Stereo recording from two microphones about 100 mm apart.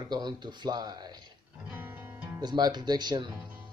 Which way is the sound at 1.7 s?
20° right (ahead or behind).